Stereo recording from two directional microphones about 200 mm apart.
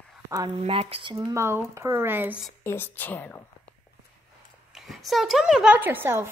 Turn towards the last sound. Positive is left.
turn(degrees=-10)  # may be behind; listen again after turning